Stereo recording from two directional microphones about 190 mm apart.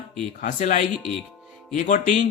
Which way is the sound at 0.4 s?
40° left (ahead or behind).